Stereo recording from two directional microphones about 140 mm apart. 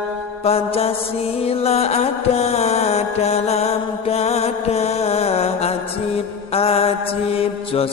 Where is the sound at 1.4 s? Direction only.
50° left (ahead or behind).